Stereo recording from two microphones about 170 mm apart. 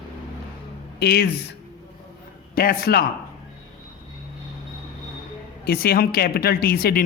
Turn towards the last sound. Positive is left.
turn(degrees=60)  # may be behind; listen again after turning